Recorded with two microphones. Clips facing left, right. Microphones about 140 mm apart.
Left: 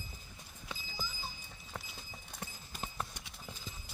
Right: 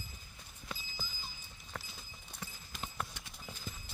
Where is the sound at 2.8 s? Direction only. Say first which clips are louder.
Left 1 dB; 10° left (ahead or behind).